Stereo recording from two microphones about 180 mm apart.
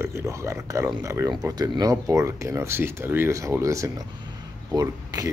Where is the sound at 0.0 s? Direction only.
15° right (ahead or behind).